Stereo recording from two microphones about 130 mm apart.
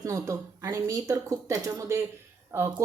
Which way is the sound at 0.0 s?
25° right (ahead or behind).